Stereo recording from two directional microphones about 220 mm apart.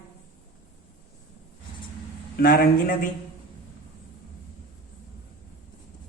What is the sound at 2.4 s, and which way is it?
Speech, 40° left (ahead or behind).